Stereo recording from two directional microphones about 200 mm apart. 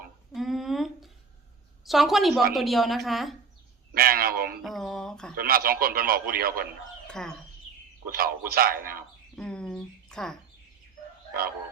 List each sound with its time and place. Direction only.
0.3 s a sound: centre (ahead or behind)
1.8 s a woman's voice: centre (ahead or behind)
3.9 s a man's voice: 50° right (ahead or behind)
4.6 s a woman's voice: centre (ahead or behind)
5.4 s a man's voice: 50° right (ahead or behind)
7.1 s speech: 5° left (ahead or behind)
8.0 s a man's voice: 50° right (ahead or behind)
9.3 s a sound: 5° left (ahead or behind)